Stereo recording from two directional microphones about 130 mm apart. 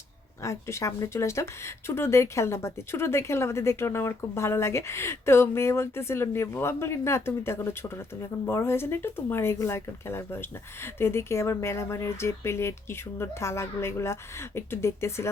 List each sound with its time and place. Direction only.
0.4 s speech: 20° left (ahead or behind)